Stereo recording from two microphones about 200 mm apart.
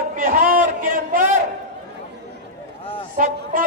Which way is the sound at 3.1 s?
45° right (ahead or behind).